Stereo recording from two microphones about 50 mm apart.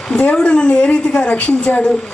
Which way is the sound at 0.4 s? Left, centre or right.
Centre.